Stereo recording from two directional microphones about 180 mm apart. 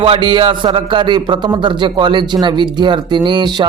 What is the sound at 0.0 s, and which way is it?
Speech, 30° right (ahead or behind).